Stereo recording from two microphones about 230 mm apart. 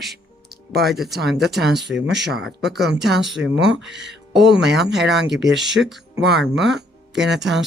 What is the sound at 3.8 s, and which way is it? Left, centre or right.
Speech, right.